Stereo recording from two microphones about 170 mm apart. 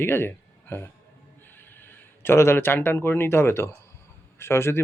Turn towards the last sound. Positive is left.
turn(degrees=15)  # may be behind; listen again after turning